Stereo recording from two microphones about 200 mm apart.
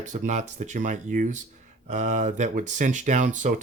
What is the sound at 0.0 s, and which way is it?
Speech, 35° right (ahead or behind).